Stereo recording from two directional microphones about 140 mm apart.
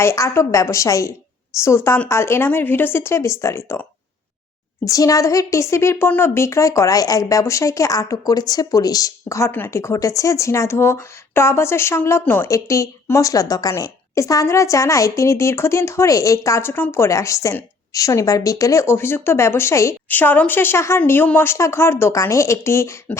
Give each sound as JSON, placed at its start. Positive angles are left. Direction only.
{"t": 0.0, "sound": "a woman's voice", "side_deg": 20}
{"t": 4.9, "sound": "a woman's voice", "side_deg": 25}